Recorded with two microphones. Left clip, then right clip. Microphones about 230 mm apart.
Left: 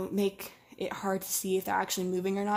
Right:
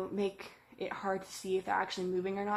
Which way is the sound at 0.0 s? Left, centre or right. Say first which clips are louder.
Left 4 dB; left.